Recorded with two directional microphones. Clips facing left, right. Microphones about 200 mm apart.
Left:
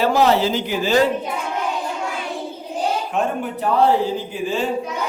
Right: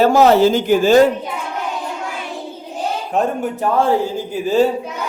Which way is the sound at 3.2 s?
45° right (ahead or behind).